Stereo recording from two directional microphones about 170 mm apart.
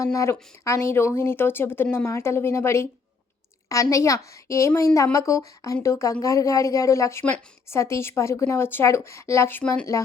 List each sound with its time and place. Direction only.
0.0 s a woman's voice: 20° left (ahead or behind)